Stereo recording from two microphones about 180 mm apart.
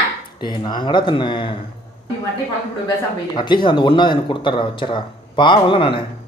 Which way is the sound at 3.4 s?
25° left (ahead or behind).